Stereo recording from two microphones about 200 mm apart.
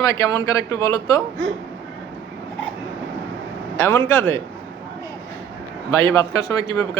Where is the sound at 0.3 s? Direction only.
15° left (ahead or behind).